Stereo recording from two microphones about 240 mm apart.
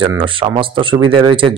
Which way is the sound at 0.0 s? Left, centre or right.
Right.